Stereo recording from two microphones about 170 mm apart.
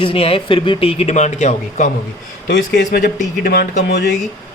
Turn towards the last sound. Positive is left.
turn(degrees=85)